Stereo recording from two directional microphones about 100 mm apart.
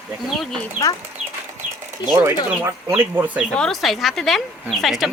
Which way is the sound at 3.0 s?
20° right (ahead or behind).